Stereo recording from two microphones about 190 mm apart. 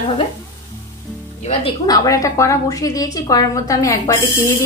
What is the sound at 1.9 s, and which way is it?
A woman's voice, 15° left (ahead or behind).